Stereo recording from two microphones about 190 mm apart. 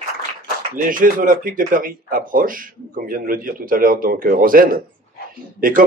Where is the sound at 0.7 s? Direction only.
45° right (ahead or behind).